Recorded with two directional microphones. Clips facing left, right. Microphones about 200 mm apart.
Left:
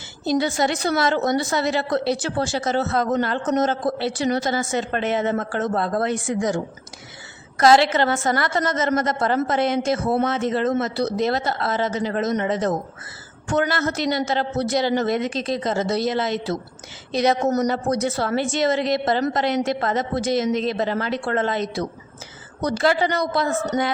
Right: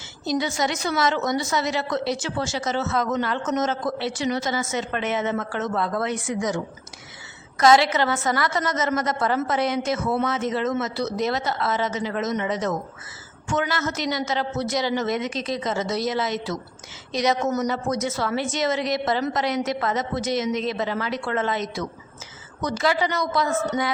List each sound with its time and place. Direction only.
0.3 s a woman's voice: 35° left (ahead or behind)